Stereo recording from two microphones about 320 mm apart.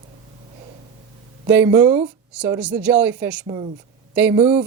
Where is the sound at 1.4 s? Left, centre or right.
Centre.